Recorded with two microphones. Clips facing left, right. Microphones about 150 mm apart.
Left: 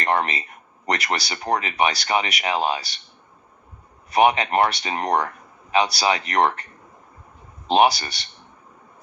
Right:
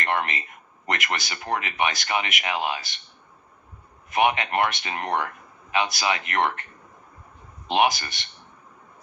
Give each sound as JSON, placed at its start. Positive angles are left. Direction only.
{"t": 0.0, "sound": "speech", "side_deg": 35}
{"t": 4.1, "sound": "speech", "side_deg": 35}
{"t": 7.7, "sound": "speech", "side_deg": 35}